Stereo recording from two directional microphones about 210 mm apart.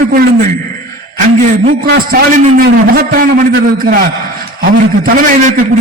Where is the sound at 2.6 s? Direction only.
45° right (ahead or behind).